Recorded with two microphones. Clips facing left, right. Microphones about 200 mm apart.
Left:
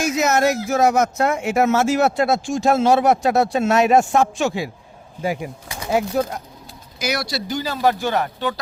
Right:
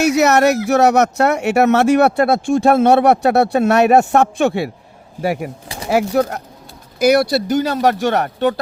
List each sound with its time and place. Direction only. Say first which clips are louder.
0.0 s speech: right 5 dB; 70° right (ahead or behind)
5.6 s a sound: right 3 dB; 30° right (ahead or behind)
5.9 s speech: right 4 dB; 70° right (ahead or behind)
7.0 s speech: right 12 dB; 55° right (ahead or behind)